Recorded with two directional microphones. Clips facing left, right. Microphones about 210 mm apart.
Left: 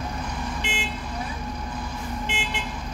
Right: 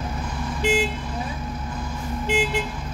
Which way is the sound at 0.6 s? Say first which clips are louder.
Right 10 dB; 40° right (ahead or behind).